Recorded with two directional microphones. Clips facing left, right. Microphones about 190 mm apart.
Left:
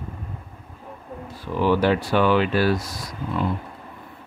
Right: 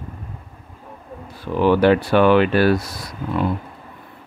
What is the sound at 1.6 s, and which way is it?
Speech, 60° right (ahead or behind).